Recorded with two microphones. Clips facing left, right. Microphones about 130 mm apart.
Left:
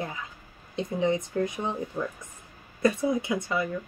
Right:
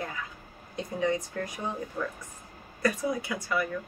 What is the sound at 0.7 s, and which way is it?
A woman's voice, 20° left (ahead or behind).